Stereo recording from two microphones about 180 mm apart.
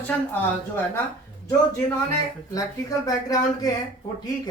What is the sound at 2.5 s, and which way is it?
Speech, 20° left (ahead or behind).